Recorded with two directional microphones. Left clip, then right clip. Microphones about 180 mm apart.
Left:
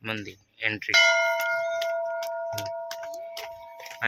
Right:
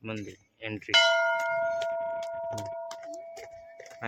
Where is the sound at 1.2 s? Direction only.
40° left (ahead or behind).